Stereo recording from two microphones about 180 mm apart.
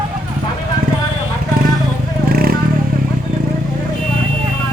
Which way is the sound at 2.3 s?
55° right (ahead or behind).